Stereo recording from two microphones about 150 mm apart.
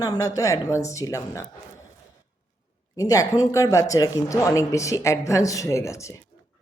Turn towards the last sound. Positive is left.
turn(degrees=20)  # may be behind; listen again after turning